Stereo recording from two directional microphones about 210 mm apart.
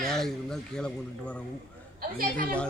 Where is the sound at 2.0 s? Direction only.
45° right (ahead or behind).